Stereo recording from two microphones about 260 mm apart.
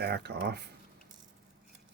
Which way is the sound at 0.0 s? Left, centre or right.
Right.